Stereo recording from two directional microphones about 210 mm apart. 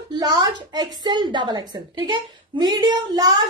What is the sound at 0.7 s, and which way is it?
A woman's voice, 20° right (ahead or behind).